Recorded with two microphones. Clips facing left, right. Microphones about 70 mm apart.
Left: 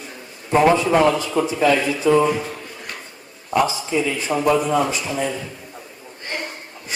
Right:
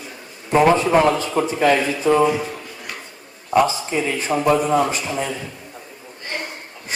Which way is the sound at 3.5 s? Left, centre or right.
Right.